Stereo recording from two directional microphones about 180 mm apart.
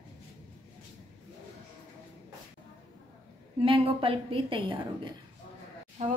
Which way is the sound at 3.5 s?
30° right (ahead or behind).